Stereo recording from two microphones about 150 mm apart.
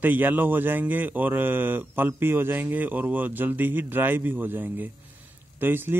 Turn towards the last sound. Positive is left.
turn(degrees=-15)  # may be behind; listen again after turning